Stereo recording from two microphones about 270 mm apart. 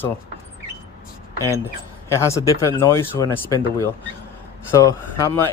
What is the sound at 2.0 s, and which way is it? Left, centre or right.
Speech, centre.